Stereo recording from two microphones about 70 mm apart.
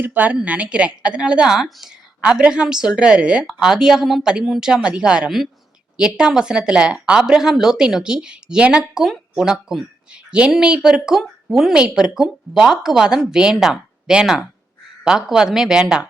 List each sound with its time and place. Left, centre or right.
0.0 s a woman's voice: right
9.0 s a woman's voice: centre